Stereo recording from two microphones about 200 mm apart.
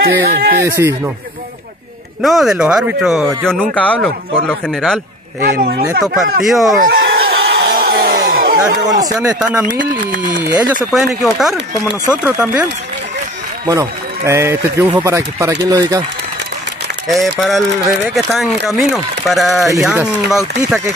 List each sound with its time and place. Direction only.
0.0 s speech: 50° right (ahead or behind)
0.7 s a man's voice: 15° right (ahead or behind)
2.2 s speech: centre (ahead or behind)
5.4 s speech: 50° right (ahead or behind)
6.4 s speech: centre (ahead or behind)
6.8 s a sound: 50° right (ahead or behind)
8.8 s speech: 20° right (ahead or behind)
10.4 s speech: 20° right (ahead or behind)
11.1 s speech: centre (ahead or behind)
13.7 s a man's voice: 15° right (ahead or behind)
17.1 s speech: centre (ahead or behind)